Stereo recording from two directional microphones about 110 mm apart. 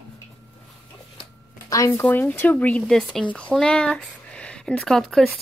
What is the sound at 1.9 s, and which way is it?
Speech, 20° left (ahead or behind).